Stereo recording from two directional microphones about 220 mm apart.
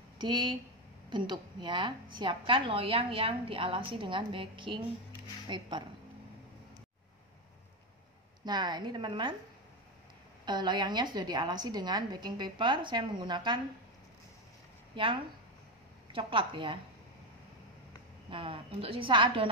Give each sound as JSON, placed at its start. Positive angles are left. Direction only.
{"t": 0.2, "sound": "a woman's voice", "side_deg": -20}
{"t": 8.5, "sound": "a woman's voice", "side_deg": -20}
{"t": 10.4, "sound": "a woman's voice", "side_deg": -20}
{"t": 15.0, "sound": "a woman's voice", "side_deg": -25}
{"t": 18.3, "sound": "a woman's voice", "side_deg": -25}